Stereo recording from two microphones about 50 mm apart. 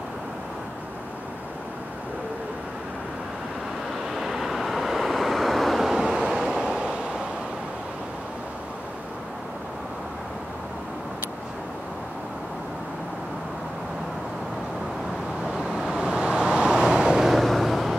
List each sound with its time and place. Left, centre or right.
4.1 s vehicle: centre
15.4 s vehicle: centre
17.3 s vehicle: centre